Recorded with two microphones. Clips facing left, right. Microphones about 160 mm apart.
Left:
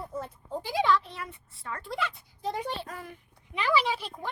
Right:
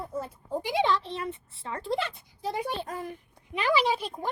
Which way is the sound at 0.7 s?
25° right (ahead or behind).